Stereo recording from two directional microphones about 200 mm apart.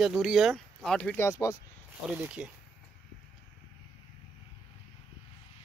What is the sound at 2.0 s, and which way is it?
Speech, 5° right (ahead or behind).